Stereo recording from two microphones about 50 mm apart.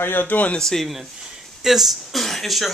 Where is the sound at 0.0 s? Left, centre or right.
Left.